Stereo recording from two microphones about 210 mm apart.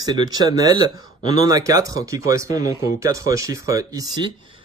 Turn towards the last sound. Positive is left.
turn(degrees=-20)  # may be behind; listen again after turning